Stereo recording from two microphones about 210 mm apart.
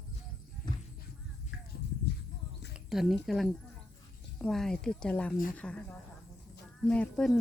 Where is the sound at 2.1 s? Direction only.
50° left (ahead or behind).